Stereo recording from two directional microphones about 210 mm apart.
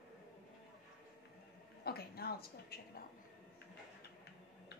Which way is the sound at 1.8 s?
50° left (ahead or behind).